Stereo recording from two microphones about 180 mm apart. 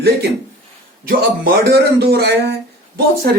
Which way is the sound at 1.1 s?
60° right (ahead or behind).